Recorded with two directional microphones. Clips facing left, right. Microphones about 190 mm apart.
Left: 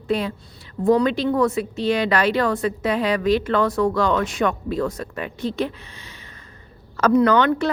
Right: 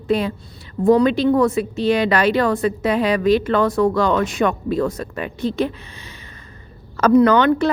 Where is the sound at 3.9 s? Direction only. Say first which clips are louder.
Right 3 dB; 15° right (ahead or behind).